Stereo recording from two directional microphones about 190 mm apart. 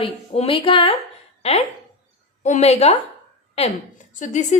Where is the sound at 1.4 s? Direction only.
35° left (ahead or behind).